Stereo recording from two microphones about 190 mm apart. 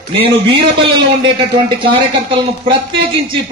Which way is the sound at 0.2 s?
25° right (ahead or behind).